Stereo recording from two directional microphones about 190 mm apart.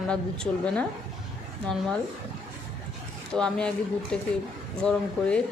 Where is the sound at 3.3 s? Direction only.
5° left (ahead or behind).